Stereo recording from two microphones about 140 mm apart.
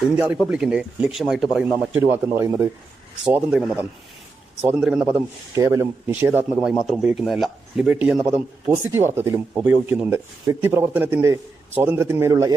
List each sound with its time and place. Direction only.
0.4 s speech: 10° right (ahead or behind)
3.2 s speech: 5° right (ahead or behind)
5.5 s speech: 20° right (ahead or behind)
6.6 s speech: 5° right (ahead or behind); by 12.5 s 25° right (ahead or behind)